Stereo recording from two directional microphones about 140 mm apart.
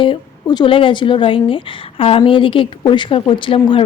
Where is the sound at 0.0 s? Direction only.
35° left (ahead or behind).